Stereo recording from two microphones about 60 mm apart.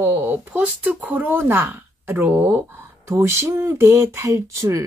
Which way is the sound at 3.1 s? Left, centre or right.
Right.